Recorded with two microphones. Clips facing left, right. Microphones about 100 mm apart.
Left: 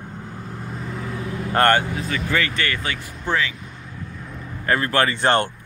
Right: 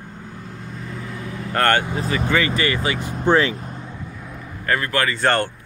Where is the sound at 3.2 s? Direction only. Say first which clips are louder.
Right 6 dB; 35° right (ahead or behind).